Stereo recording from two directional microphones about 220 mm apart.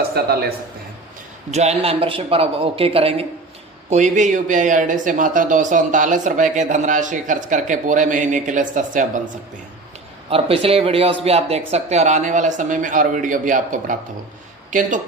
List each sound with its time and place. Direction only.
0.1 s a man's voice: 45° right (ahead or behind)
1.5 s speech: 30° right (ahead or behind)